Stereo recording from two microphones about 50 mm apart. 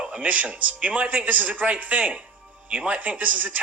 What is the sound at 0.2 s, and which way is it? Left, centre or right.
Speech, right.